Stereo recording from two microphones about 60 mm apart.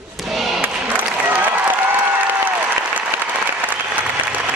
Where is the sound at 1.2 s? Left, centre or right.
Right.